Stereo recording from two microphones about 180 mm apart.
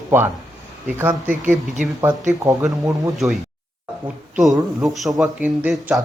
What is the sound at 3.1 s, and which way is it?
Speech, centre (ahead or behind).